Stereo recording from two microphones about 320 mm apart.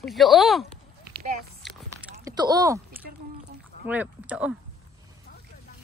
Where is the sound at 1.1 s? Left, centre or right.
Right.